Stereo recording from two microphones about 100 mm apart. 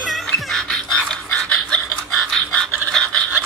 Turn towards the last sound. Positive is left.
turn(degrees=5)  # may be behind; listen again after turning